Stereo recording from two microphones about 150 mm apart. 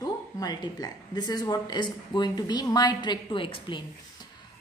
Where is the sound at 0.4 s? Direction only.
25° left (ahead or behind).